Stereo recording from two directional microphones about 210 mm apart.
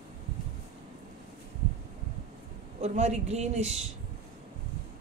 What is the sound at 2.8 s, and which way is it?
Speech, 30° right (ahead or behind).